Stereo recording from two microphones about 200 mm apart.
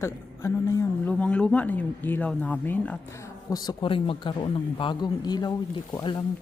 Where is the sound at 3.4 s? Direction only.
20° left (ahead or behind).